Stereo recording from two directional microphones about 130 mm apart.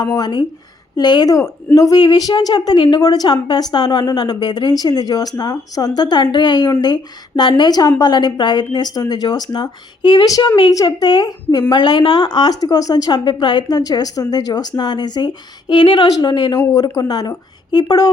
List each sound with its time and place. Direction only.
0.0 s a woman's voice: 30° left (ahead or behind)
16.0 s speech: 25° left (ahead or behind)
16.3 s a woman's voice: 40° left (ahead or behind)